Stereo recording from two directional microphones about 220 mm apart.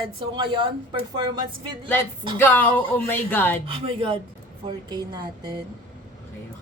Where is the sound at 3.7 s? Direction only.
25° right (ahead or behind).